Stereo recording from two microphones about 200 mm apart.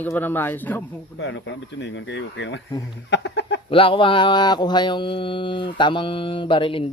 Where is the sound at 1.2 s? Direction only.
65° left (ahead or behind).